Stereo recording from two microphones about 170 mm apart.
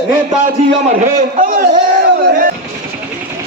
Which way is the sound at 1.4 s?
50° right (ahead or behind).